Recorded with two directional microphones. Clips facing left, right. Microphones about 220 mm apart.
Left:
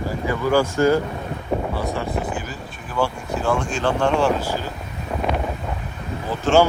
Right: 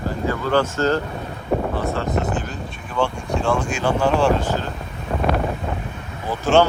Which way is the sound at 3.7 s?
10° right (ahead or behind).